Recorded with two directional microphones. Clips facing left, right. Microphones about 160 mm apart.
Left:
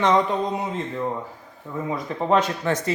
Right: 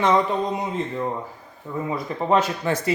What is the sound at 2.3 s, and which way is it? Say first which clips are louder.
Speech: even; 10° right (ahead or behind).